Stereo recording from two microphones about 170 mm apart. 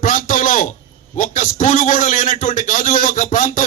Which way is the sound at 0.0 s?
50° left (ahead or behind).